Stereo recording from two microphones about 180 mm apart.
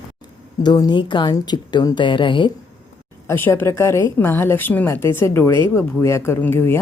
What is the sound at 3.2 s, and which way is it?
A woman's voice, 10° left (ahead or behind).